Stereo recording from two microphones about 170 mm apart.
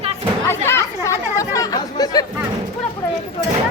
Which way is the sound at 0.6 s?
15° left (ahead or behind).